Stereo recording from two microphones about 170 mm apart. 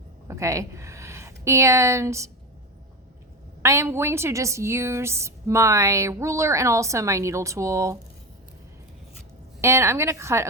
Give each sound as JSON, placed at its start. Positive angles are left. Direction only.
{"t": 0.3, "sound": "a woman's voice", "side_deg": -15}
{"t": 3.6, "sound": "a woman's voice", "side_deg": -15}
{"t": 9.6, "sound": "a woman's voice", "side_deg": -15}